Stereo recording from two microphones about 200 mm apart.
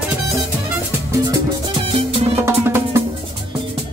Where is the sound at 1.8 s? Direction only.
25° right (ahead or behind).